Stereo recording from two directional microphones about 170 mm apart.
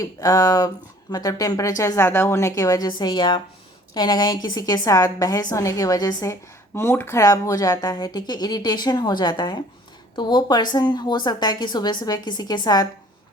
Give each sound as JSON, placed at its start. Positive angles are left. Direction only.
{"t": 0.0, "sound": "speech", "side_deg": 20}